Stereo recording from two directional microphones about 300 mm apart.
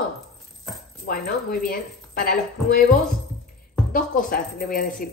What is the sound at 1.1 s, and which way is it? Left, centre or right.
A woman's voice, left.